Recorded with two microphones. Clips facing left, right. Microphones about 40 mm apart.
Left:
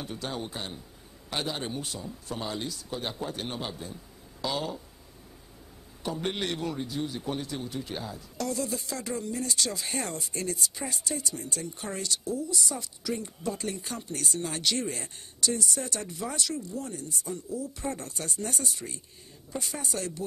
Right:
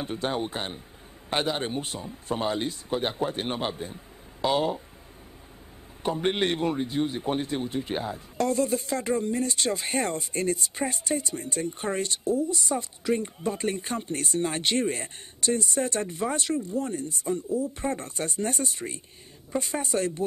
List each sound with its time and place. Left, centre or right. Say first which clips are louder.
0.0 s a man's voice: right 6 dB; right
6.0 s a man's voice: right 6 dB; right